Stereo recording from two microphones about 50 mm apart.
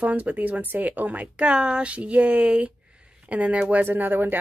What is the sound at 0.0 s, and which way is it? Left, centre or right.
Speech, right.